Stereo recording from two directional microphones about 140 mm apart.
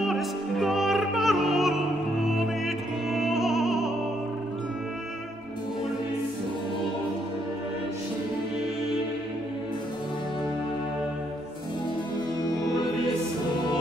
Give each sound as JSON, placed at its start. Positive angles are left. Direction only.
{"t": 0.0, "sound": "music", "side_deg": 0}
{"t": 2.2, "sound": "opera", "side_deg": 0}